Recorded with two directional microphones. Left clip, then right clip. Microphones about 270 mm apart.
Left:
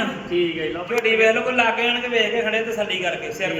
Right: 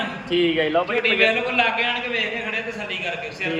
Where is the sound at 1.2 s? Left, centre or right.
Left.